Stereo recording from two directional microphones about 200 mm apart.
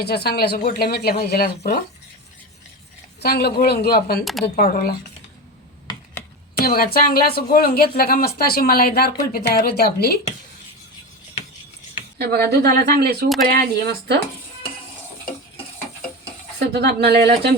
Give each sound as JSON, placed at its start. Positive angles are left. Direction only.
{"t": 0.0, "sound": "speech", "side_deg": 55}
{"t": 3.2, "sound": "speech", "side_deg": 50}
{"t": 4.2, "sound": "speech", "side_deg": 0}
{"t": 4.4, "sound": "speech", "side_deg": 50}
{"t": 6.6, "sound": "speech", "side_deg": 50}
{"t": 12.2, "sound": "speech", "side_deg": -55}
{"t": 16.6, "sound": "speech", "side_deg": -55}